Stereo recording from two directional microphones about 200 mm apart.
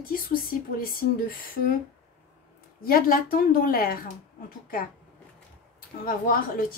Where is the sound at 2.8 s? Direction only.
45° left (ahead or behind).